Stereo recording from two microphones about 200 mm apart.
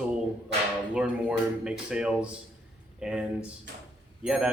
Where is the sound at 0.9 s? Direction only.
5° right (ahead or behind).